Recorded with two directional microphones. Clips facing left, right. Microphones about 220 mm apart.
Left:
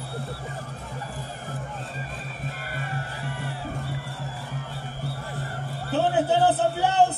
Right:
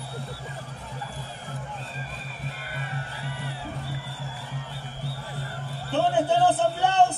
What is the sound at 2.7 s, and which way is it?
Music, 50° left (ahead or behind).